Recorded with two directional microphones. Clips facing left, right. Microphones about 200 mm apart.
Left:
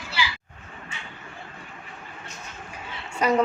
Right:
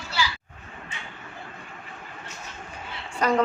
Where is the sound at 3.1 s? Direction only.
10° left (ahead or behind).